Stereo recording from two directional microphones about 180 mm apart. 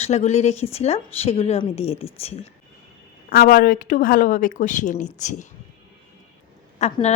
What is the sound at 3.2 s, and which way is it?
A woman's voice, 50° left (ahead or behind).